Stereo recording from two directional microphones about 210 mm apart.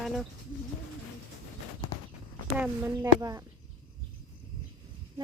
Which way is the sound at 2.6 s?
10° right (ahead or behind).